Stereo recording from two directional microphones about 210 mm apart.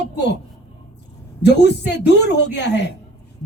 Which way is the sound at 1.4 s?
55° left (ahead or behind).